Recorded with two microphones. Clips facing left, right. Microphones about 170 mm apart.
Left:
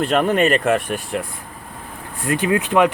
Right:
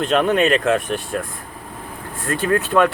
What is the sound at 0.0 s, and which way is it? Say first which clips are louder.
Speech: even; 10° left (ahead or behind).